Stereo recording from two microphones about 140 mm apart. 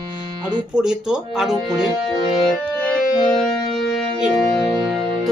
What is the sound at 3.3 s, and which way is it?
Music, centre (ahead or behind).